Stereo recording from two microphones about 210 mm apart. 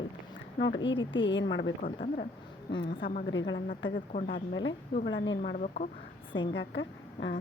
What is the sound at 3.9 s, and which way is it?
Speech, 40° left (ahead or behind).